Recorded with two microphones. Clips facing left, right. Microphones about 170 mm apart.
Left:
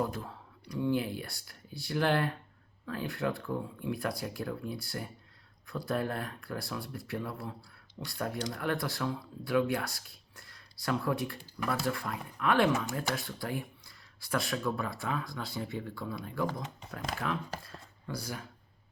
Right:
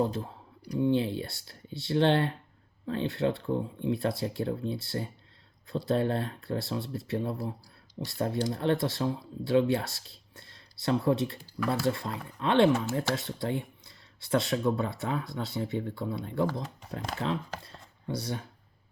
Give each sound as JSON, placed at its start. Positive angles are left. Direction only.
{"t": 0.0, "sound": "speech", "side_deg": -25}